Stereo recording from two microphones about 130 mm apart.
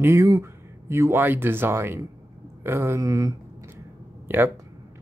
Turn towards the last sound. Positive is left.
turn(degrees=-15)  # may be behind; listen again after turning